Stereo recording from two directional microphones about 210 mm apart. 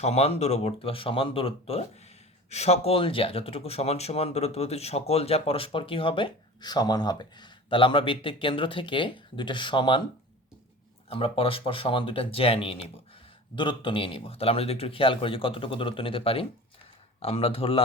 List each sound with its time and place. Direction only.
0.0 s speech: 30° left (ahead or behind)
11.1 s speech: 25° left (ahead or behind)